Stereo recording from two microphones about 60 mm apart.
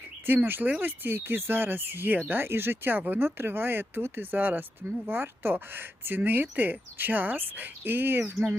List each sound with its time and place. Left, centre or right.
0.3 s speech: right